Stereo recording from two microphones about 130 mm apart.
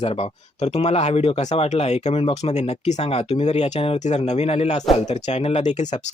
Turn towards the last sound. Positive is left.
turn(degrees=65)  # may be behind; listen again after turning